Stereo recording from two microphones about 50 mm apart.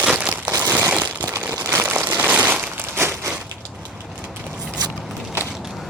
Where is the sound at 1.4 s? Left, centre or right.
Right.